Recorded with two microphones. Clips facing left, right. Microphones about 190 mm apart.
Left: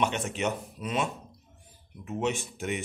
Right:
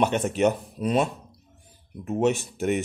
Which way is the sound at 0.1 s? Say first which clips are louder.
Right 8 dB; 40° right (ahead or behind).